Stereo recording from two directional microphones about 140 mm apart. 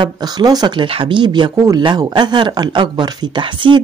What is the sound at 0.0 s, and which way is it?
Speech, 30° right (ahead or behind).